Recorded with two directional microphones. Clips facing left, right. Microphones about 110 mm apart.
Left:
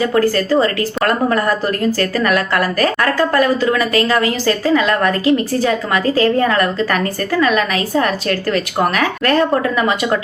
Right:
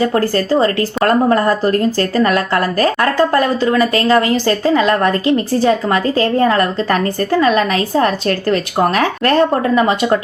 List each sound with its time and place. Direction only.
0.0 s speech: 30° right (ahead or behind)